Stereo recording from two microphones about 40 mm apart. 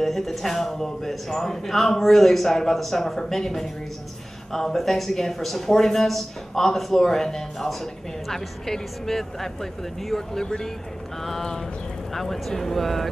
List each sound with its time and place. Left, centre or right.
0.0 s a man's voice: centre
12.1 s a man's voice: centre